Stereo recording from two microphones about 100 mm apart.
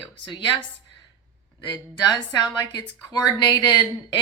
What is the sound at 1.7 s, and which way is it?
Speech, 45° left (ahead or behind).